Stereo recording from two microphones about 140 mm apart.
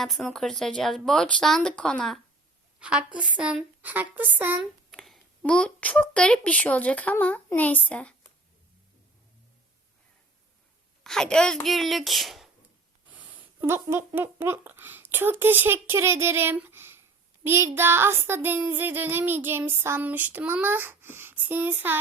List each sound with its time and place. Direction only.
0.0 s speech: centre (ahead or behind)
2.8 s child singing: 10° right (ahead or behind)
4.9 s a sound: centre (ahead or behind)
5.5 s speech: 5° left (ahead or behind)
11.0 s speech: 5° left (ahead or behind)
13.1 s speech: 10° right (ahead or behind)
17.4 s child singing: 20° right (ahead or behind)